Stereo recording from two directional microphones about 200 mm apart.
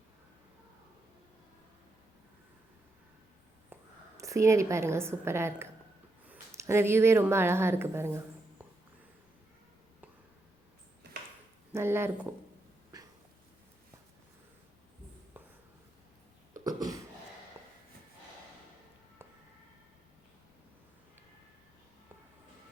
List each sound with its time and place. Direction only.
3.7 s whispering: 10° right (ahead or behind)
4.2 s a woman's voice: 15° right (ahead or behind)
11.7 s a woman's voice: 10° right (ahead or behind)
16.6 s a sound: 15° right (ahead or behind)